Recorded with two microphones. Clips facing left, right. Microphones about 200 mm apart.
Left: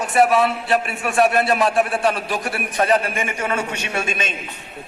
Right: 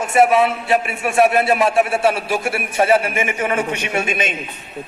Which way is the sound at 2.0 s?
10° right (ahead or behind).